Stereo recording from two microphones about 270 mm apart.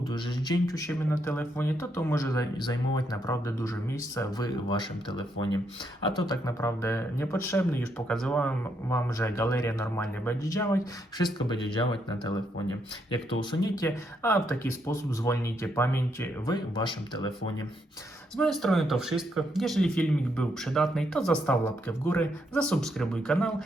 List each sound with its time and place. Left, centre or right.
0.1 s speech: centre
13.4 s speech: centre
18.3 s speech: centre